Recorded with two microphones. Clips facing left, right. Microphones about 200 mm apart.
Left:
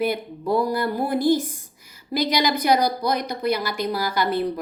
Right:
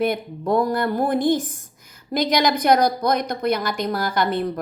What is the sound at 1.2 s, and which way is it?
Speech, 10° left (ahead or behind).